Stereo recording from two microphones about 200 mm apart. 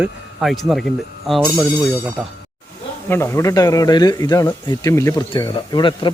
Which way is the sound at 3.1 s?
15° left (ahead or behind).